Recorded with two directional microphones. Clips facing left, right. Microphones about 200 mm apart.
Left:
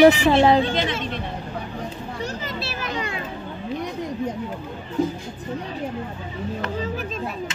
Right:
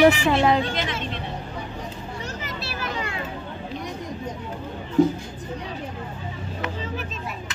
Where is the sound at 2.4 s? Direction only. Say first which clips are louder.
Left 2 dB; 25° left (ahead or behind).